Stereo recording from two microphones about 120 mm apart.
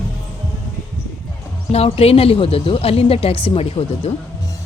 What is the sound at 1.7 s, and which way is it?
A woman's voice, 55° left (ahead or behind).